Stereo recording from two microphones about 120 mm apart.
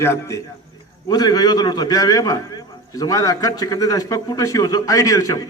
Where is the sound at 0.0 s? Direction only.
25° left (ahead or behind).